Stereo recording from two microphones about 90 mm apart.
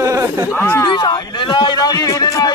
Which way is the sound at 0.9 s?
55° left (ahead or behind).